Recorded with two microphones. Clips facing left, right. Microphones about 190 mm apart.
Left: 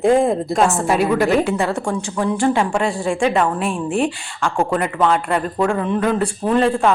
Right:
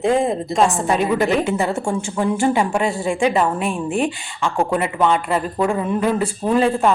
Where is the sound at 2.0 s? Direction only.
5° right (ahead or behind).